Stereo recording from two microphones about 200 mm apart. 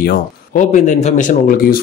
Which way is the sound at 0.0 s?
45° left (ahead or behind).